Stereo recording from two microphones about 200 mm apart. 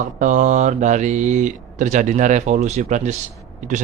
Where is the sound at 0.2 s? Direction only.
40° right (ahead or behind).